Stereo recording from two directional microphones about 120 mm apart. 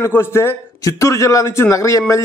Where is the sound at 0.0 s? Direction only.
20° left (ahead or behind).